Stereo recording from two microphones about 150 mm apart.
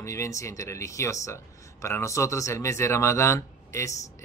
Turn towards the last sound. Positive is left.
turn(degrees=20)  # may be behind; listen again after turning